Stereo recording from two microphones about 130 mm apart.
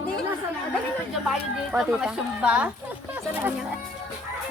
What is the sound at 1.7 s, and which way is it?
Speech, 5° right (ahead or behind).